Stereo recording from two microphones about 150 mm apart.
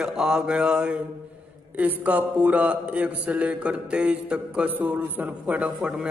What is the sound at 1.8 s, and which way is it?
A man's voice, 10° right (ahead or behind).